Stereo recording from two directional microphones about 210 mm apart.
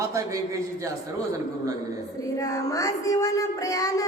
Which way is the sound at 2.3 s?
15° left (ahead or behind).